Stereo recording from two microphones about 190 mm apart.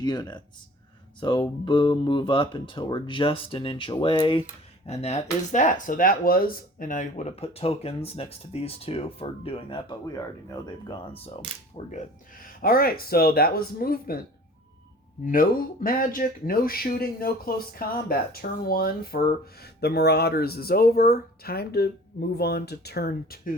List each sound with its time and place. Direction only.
0.0 s speech: 20° left (ahead or behind)
11.5 s speech: 30° right (ahead or behind)
11.9 s speech: 45° left (ahead or behind)
15.2 s speech: 45° left (ahead or behind)